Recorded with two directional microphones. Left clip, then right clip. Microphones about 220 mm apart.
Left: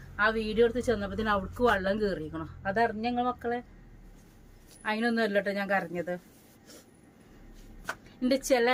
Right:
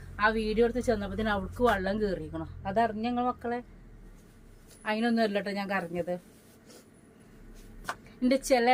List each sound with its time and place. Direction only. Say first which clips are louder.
0.2 s a woman's voice: left 1 dB; 15° left (ahead or behind)
4.8 s a woman's voice: even; 15° left (ahead or behind)
8.2 s a woman's voice: even; 15° left (ahead or behind)